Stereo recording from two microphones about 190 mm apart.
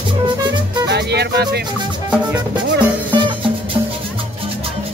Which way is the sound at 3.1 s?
25° right (ahead or behind).